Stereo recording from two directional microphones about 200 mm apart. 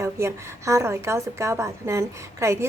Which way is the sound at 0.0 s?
15° right (ahead or behind).